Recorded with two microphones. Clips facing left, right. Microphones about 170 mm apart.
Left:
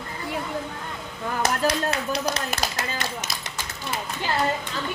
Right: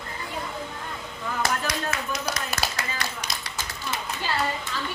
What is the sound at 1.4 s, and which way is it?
Clapping, 30° left (ahead or behind).